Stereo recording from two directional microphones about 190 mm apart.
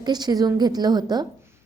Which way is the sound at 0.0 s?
20° right (ahead or behind).